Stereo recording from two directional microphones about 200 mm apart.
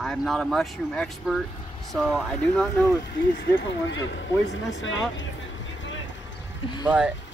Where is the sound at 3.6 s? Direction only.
65° left (ahead or behind).